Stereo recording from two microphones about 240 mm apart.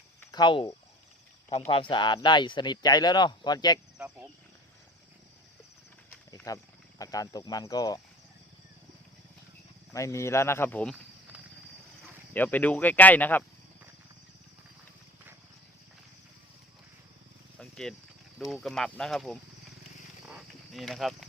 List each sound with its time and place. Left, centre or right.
0.2 s cricket: centre
1.5 s speech: left
3.9 s speech: centre
6.3 s wild animals: centre
7.0 s speech: centre
9.9 s speech: centre
12.3 s speech: centre
17.6 s mechanisms: centre
18.3 s speech: centre
20.3 s clip-clop: centre